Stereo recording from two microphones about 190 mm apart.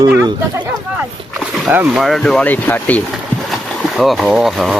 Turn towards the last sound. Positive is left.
turn(degrees=0)  # may be behind; listen again after turning